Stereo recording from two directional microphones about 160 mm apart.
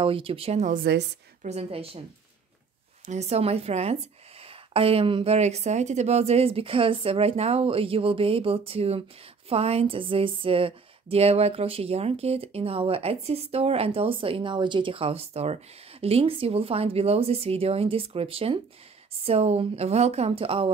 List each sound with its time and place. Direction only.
0.0 s speech: 35° right (ahead or behind)
3.1 s speech: 45° right (ahead or behind)